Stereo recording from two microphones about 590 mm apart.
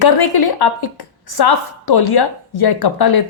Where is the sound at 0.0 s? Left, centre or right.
Left.